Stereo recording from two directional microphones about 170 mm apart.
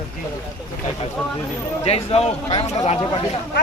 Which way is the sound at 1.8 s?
35° left (ahead or behind).